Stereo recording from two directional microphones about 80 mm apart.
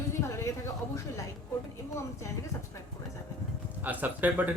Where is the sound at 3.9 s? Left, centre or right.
Right.